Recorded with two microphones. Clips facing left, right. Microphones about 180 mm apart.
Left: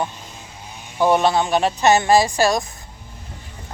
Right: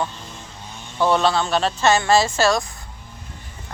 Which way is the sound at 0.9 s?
15° left (ahead or behind).